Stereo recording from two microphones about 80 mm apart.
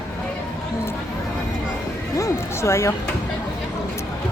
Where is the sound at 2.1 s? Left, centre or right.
Left.